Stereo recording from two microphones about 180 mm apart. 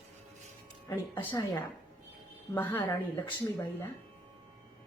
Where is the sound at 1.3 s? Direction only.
25° left (ahead or behind).